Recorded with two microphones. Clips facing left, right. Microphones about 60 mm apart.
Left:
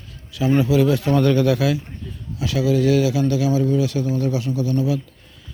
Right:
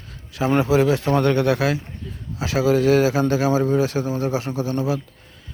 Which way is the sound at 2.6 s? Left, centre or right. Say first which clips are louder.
Right 1 dB; right.